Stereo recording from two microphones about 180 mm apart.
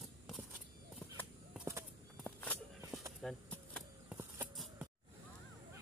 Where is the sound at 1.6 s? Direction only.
15° right (ahead or behind).